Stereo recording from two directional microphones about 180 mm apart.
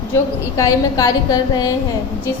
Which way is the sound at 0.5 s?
20° left (ahead or behind).